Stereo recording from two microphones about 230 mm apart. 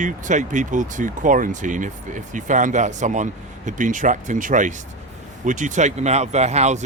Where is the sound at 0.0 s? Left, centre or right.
Right.